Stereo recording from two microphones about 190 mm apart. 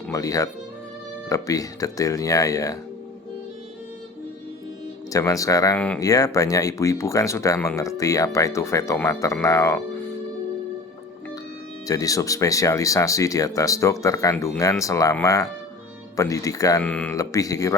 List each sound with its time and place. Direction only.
0.1 s speech: 20° left (ahead or behind)
5.1 s speech: 15° left (ahead or behind)
11.9 s speech: 20° left (ahead or behind)
16.8 s speech: 5° left (ahead or behind)
17.2 s speech: 15° left (ahead or behind)